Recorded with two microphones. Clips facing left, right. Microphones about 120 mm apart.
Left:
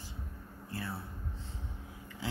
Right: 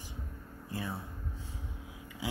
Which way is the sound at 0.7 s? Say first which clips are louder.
Right 2 dB; 15° right (ahead or behind).